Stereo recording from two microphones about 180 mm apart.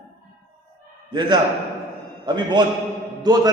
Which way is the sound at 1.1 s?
25° right (ahead or behind).